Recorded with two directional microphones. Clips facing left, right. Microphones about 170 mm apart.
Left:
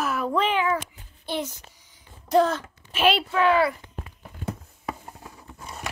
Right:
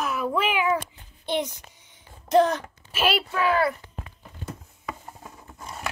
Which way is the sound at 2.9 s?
10° right (ahead or behind).